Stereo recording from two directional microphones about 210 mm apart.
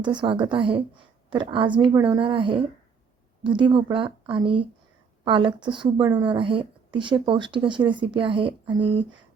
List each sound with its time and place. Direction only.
0.0 s speech: 20° right (ahead or behind)